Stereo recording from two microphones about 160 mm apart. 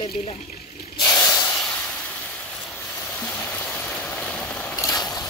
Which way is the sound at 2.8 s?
15° left (ahead or behind).